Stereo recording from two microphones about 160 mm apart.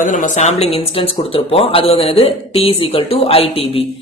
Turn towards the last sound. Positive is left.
turn(degrees=40)  # may be behind; listen again after turning